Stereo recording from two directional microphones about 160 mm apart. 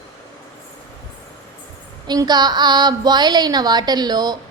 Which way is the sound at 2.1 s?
25° right (ahead or behind).